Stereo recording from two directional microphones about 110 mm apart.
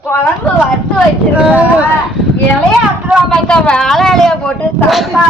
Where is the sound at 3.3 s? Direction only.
10° left (ahead or behind).